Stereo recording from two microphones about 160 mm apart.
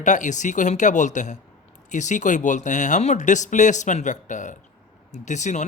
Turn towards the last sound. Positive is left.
turn(degrees=50)  # may be behind; listen again after turning